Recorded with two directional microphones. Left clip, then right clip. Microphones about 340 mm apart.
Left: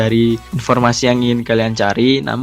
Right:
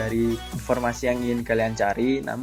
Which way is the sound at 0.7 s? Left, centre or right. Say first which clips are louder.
Left 10 dB; left.